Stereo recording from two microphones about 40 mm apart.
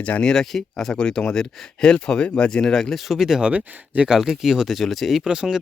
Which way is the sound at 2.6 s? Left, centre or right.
Centre.